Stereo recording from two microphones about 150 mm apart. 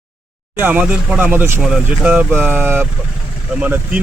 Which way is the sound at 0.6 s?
10° right (ahead or behind).